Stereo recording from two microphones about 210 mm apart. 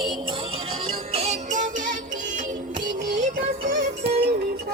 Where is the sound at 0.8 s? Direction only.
30° right (ahead or behind).